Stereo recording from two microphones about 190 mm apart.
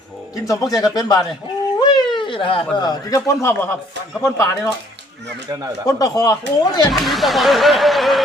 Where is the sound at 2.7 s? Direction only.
20° left (ahead or behind).